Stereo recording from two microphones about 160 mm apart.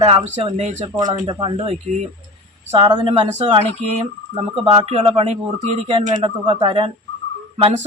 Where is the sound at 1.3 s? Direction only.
30° right (ahead or behind).